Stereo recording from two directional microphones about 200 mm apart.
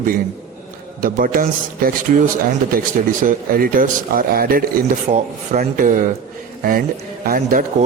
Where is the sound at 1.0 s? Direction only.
45° right (ahead or behind).